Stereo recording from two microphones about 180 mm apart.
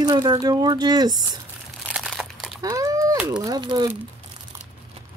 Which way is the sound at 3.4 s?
25° right (ahead or behind).